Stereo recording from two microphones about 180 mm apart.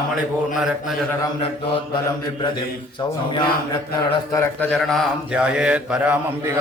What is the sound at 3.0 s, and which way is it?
Speech, 25° left (ahead or behind).